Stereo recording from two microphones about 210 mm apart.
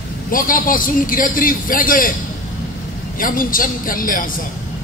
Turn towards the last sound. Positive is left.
turn(degrees=40)  # may be behind; listen again after turning